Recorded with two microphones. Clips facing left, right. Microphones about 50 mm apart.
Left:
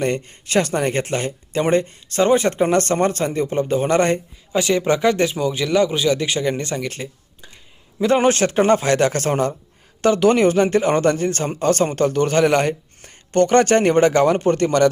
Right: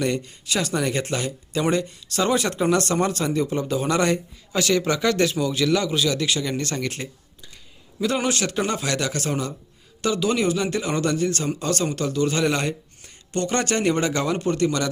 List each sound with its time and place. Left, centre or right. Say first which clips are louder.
0.0 s a man's voice: left 3 dB; left
4.5 s speech: left 4 dB; centre
6.8 s speech: left 2 dB; centre
7.9 s a man's voice: left 7 dB; left